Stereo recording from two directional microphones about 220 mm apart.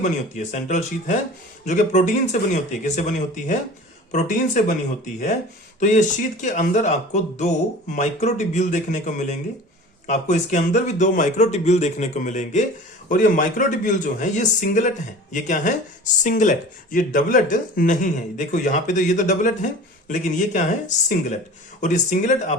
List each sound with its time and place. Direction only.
0.0 s speech: 35° left (ahead or behind)
5.8 s speech: 35° left (ahead or behind)